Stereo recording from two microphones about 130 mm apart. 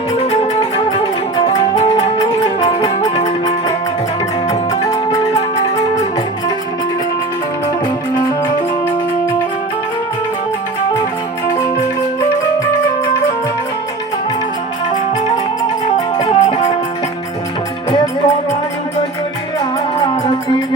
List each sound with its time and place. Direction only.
0.2 s music: 50° left (ahead or behind)
3.2 s music: 60° left (ahead or behind)
16.2 s music: 50° left (ahead or behind)